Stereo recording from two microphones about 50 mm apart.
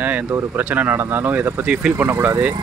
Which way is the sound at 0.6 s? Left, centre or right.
Right.